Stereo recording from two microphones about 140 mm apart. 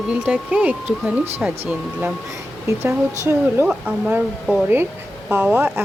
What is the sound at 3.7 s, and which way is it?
Speech, 5° right (ahead or behind).